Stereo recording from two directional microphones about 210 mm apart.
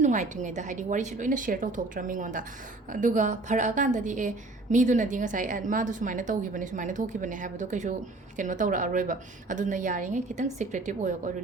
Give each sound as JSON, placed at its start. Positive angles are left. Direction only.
{"t": 0.0, "sound": "a woman's voice", "side_deg": -35}